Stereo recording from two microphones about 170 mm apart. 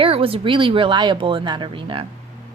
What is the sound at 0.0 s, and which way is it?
A woman's voice, 30° right (ahead or behind).